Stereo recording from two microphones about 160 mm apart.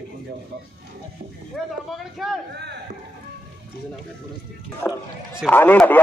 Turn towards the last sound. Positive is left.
turn(degrees=10)  # may be behind; listen again after turning